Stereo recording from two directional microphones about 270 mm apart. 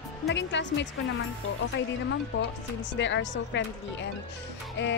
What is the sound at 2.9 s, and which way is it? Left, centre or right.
Speech, left.